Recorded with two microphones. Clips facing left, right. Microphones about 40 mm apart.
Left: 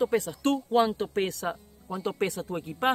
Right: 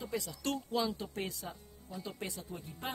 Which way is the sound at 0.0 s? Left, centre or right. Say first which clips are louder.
Left 12 dB; left.